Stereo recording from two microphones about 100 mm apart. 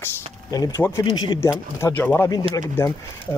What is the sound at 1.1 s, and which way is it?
Speech, 45° left (ahead or behind).